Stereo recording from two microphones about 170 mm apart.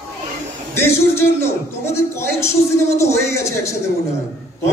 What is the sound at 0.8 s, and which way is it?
A man's voice, 15° left (ahead or behind).